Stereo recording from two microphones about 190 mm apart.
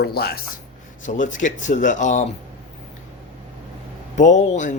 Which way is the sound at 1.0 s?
40° left (ahead or behind).